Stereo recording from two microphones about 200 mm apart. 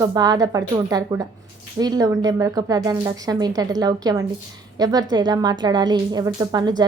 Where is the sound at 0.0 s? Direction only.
20° right (ahead or behind).